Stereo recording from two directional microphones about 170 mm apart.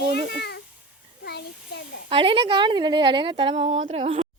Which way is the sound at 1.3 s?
75° left (ahead or behind).